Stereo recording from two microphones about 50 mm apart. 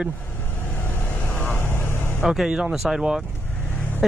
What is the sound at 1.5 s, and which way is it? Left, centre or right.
Vehicle, left.